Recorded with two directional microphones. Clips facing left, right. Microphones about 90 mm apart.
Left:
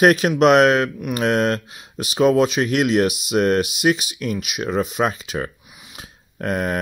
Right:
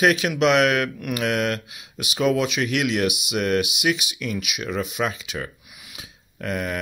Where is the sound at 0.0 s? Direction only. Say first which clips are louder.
Left 5 dB; 40° left (ahead or behind).